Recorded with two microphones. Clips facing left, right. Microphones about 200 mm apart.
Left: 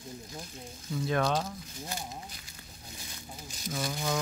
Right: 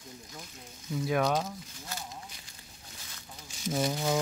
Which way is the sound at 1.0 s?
10° right (ahead or behind).